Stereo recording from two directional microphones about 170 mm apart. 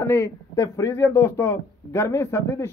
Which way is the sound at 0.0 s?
15° left (ahead or behind).